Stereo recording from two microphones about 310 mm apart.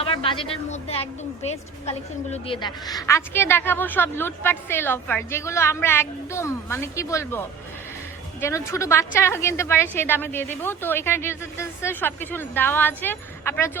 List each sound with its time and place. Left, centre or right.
0.0 s a woman's voice: centre